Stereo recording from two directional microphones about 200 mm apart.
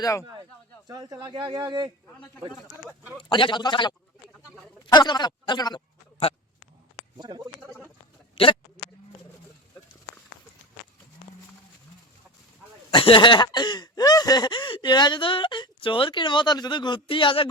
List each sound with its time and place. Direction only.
0.0 s speech: 15° left (ahead or behind)
0.9 s speech: 20° right (ahead or behind)
3.2 s a sound: 25° left (ahead or behind)
4.9 s speech: 20° left (ahead or behind)
7.2 s speech: 20° right (ahead or behind)
12.9 s a sound: 25° left (ahead or behind)